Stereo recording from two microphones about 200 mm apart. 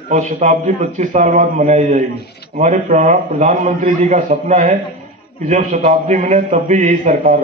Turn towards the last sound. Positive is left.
turn(degrees=-35)  # may be behind; listen again after turning